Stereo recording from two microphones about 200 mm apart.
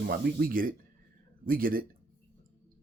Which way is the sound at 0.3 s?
45° right (ahead or behind).